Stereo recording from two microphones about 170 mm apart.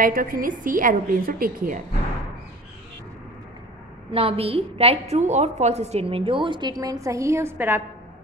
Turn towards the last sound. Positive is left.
turn(degrees=-15)  # may be behind; listen again after turning